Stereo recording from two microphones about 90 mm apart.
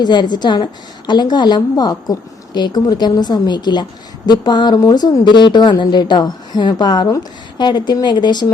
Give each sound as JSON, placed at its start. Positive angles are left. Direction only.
{"t": 0.0, "sound": "a woman's voice", "side_deg": 55}